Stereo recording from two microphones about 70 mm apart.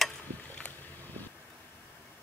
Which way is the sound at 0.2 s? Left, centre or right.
Left.